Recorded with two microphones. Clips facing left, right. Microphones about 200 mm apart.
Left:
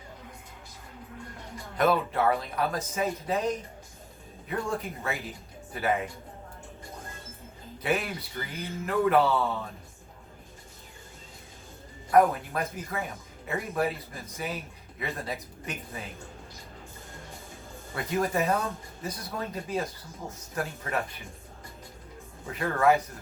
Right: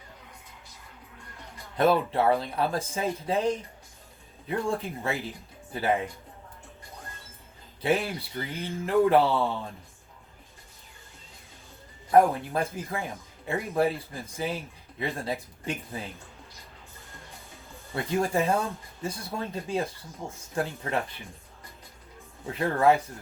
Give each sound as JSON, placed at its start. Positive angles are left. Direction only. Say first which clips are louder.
{"t": 1.8, "sound": "speech", "louder": "right 2 dB", "side_deg": -30}
{"t": 7.8, "sound": "speech", "louder": "right 3 dB", "side_deg": -30}
{"t": 12.1, "sound": "speech", "louder": "right 1 dB", "side_deg": -30}
{"t": 17.9, "sound": "speech", "louder": "right 2 dB", "side_deg": -30}
{"t": 22.5, "sound": "speech", "louder": "right 1 dB", "side_deg": -30}